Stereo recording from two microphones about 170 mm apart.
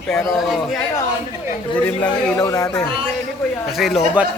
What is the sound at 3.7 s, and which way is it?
Speech, centre (ahead or behind).